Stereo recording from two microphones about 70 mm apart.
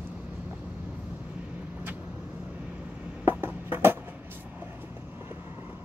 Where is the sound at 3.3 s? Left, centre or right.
Right.